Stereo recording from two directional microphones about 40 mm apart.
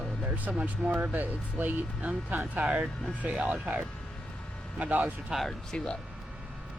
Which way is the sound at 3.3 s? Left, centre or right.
Right.